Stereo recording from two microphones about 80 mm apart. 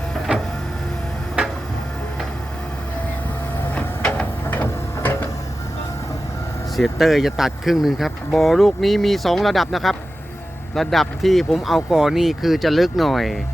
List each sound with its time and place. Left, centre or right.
3.8 s a sound: centre
4.4 s printer: left
6.7 s speech: centre